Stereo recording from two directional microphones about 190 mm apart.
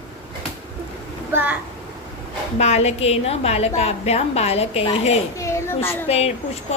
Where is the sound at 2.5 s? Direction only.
35° left (ahead or behind).